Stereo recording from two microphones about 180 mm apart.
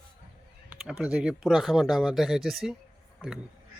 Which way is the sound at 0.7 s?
5° right (ahead or behind).